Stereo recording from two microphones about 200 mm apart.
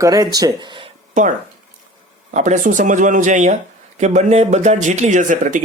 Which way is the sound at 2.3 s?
35° right (ahead or behind).